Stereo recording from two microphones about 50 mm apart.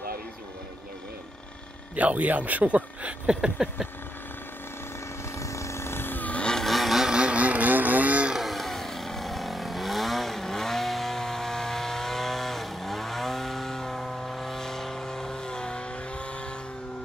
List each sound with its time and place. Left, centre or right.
2.0 s speech: right; by 3.9 s centre
5.4 s vehicle: left
6.5 s vehicle: centre
7.1 s vehicle: right
8.4 s vehicle: centre